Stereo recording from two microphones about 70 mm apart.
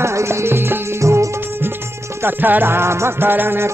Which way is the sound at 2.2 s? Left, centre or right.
Right.